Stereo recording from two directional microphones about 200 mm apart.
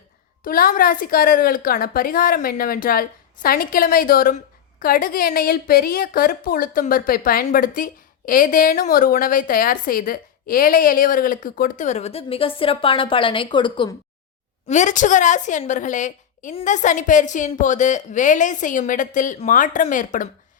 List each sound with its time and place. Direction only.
0.4 s a woman's voice: 45° left (ahead or behind); by 13.9 s 25° left (ahead or behind)
14.7 s a woman's voice: 35° left (ahead or behind)